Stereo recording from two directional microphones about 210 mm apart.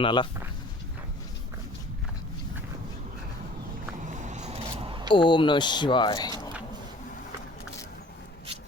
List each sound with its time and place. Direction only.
0.0 s speech: 20° left (ahead or behind)
4.0 s a sound: 35° right (ahead or behind)
5.1 s speech: 20° left (ahead or behind)